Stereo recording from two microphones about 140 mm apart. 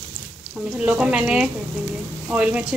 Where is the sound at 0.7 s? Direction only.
5° right (ahead or behind).